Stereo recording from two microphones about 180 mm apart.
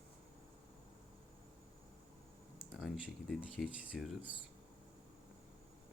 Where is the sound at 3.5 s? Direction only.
5° right (ahead or behind).